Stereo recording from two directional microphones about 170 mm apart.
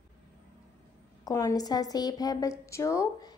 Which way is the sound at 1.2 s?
20° left (ahead or behind).